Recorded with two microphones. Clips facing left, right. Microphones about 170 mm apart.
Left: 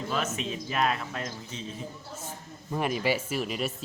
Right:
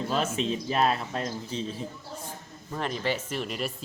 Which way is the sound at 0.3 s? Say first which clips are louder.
Right 4 dB; 30° right (ahead or behind).